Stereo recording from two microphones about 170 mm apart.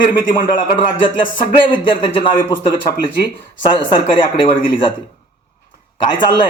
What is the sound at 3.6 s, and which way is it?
Speech, 30° left (ahead or behind).